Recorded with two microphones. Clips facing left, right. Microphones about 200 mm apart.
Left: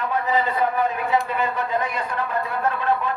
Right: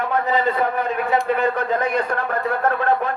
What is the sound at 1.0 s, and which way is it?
Speech, 60° right (ahead or behind).